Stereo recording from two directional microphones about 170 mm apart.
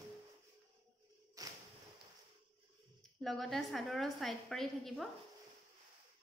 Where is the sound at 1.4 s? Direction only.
20° right (ahead or behind).